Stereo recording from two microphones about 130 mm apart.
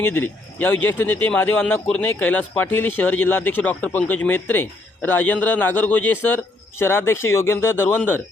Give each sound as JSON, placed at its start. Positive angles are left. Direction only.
{"t": 0.0, "sound": "speech", "side_deg": 15}